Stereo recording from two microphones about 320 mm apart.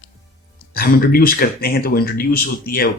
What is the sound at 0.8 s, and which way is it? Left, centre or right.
Speech, left.